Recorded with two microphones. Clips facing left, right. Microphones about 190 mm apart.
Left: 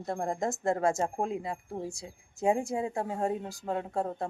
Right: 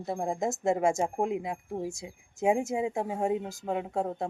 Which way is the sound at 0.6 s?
15° right (ahead or behind).